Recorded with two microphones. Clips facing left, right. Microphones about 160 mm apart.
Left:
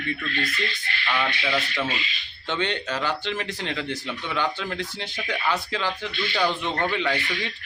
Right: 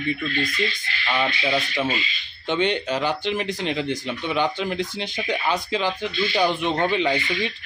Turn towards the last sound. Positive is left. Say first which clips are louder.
# right 4 dB
turn(degrees=-20)  # may be behind; listen again after turning